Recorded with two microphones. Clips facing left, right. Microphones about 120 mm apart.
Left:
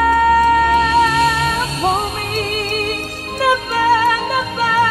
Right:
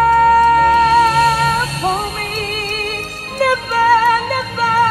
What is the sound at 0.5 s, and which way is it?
Music, 45° right (ahead or behind).